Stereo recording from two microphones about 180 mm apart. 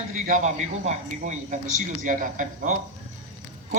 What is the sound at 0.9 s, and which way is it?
A man's voice, 40° right (ahead or behind).